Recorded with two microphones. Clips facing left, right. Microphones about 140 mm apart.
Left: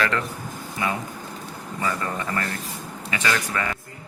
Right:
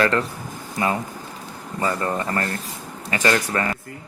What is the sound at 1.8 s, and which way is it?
Speech, 35° right (ahead or behind).